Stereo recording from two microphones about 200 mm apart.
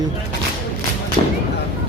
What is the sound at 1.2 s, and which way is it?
Speech, 25° left (ahead or behind).